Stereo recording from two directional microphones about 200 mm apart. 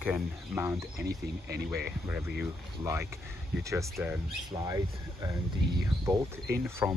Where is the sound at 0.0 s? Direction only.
10° right (ahead or behind).